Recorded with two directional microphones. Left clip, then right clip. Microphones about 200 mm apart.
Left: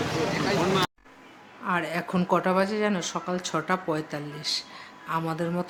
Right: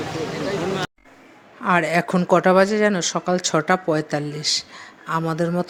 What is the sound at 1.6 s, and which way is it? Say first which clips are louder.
Speech: right 9 dB; 35° right (ahead or behind).